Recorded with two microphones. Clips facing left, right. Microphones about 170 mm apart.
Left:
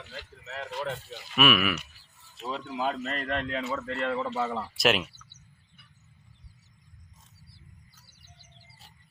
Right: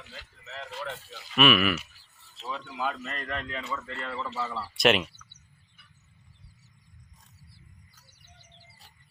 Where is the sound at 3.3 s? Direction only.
55° left (ahead or behind).